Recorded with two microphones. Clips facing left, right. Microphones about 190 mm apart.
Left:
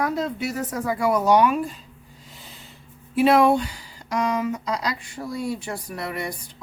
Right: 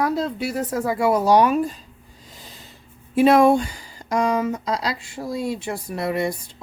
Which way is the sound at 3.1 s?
45° right (ahead or behind).